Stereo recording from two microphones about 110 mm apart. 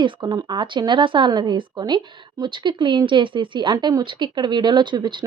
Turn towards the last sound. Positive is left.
turn(degrees=-45)  # may be behind; listen again after turning